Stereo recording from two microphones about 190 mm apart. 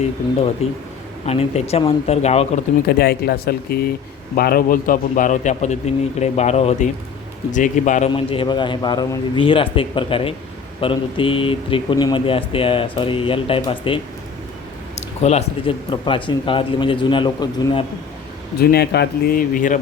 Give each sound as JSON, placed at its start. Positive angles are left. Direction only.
{"t": 0.6, "sound": "a man's voice", "side_deg": 35}
{"t": 2.8, "sound": "a man's voice", "side_deg": 55}
{"t": 8.1, "sound": "speech", "side_deg": 25}
{"t": 15.2, "sound": "speech", "side_deg": 35}
{"t": 18.6, "sound": "speech", "side_deg": 55}